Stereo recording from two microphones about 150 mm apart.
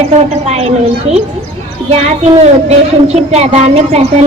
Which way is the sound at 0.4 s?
45° right (ahead or behind).